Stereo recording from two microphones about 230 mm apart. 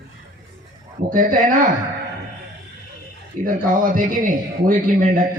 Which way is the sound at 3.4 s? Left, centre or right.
Right.